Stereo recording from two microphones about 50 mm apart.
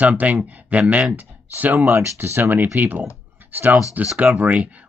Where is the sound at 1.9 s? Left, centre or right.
Right.